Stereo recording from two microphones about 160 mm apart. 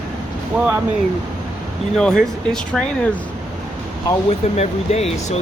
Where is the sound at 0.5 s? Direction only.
5° right (ahead or behind).